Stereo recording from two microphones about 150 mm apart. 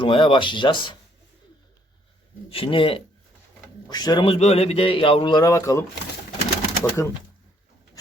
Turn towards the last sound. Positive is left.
turn(degrees=20)  # may be behind; listen again after turning